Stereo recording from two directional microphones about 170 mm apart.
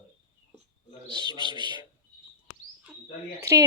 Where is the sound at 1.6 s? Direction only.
25° right (ahead or behind).